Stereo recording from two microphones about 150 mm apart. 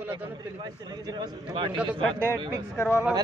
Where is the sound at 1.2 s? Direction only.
35° right (ahead or behind).